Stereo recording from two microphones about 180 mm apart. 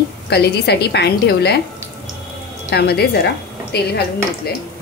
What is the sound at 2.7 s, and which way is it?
A woman's voice, 65° left (ahead or behind).